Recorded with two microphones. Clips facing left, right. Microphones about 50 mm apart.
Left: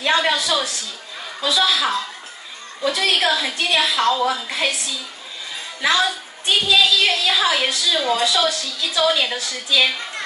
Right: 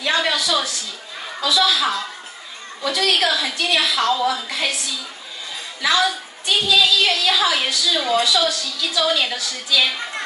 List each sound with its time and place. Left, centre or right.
0.0 s a sound: left
1.4 s a woman's voice: left
5.8 s a woman's voice: left